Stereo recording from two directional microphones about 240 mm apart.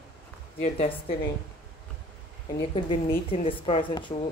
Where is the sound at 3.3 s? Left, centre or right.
Left.